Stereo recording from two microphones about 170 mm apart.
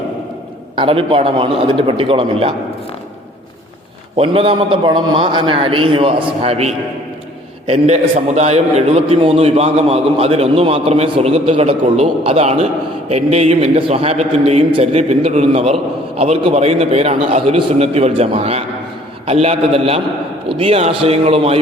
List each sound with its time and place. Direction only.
0.8 s a man's voice: 35° right (ahead or behind)
4.2 s a man's voice: 35° right (ahead or behind)
8.4 s a man's voice: 40° right (ahead or behind)